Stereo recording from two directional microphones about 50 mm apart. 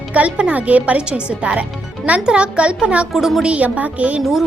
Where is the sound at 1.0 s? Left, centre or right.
Centre.